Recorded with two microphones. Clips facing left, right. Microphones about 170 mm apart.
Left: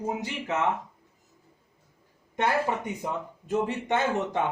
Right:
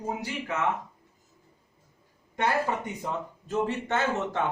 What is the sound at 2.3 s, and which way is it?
Speech, 20° left (ahead or behind).